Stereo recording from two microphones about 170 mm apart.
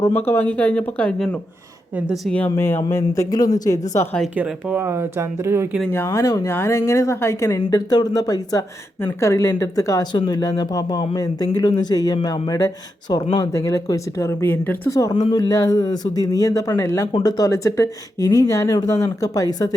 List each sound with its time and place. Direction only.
0.3 s a woman's voice: 10° left (ahead or behind)
2.0 s speech: 5° right (ahead or behind)
2.3 s a woman's voice: 10° left (ahead or behind)
4.4 s speech: 10° right (ahead or behind)
5.9 s a woman's voice: 15° left (ahead or behind)